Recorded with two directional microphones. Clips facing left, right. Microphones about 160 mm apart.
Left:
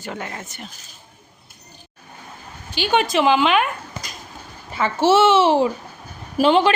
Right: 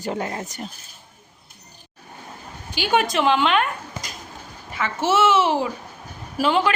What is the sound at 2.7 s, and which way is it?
Speech, 10° right (ahead or behind).